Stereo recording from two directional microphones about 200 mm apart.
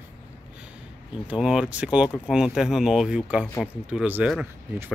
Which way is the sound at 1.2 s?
5° right (ahead or behind).